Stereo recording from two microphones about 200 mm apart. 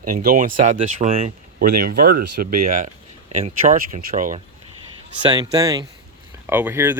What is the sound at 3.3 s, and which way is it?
Speech, 30° right (ahead or behind).